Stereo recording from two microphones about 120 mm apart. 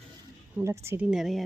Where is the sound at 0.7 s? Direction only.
20° right (ahead or behind).